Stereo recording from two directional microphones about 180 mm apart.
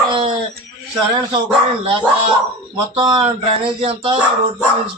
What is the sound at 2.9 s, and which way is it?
Speech, 30° right (ahead or behind).